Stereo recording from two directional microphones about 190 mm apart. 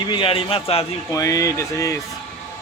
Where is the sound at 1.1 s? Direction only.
15° left (ahead or behind).